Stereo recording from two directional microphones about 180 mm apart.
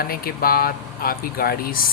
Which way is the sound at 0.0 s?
55° left (ahead or behind).